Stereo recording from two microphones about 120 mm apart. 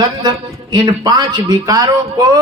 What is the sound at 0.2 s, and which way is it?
A man's voice, 35° right (ahead or behind).